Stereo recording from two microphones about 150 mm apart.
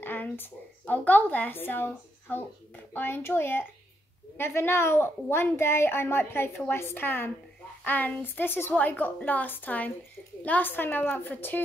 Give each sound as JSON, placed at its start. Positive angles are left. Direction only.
{"t": 0.0, "sound": "a woman's voice", "side_deg": 15}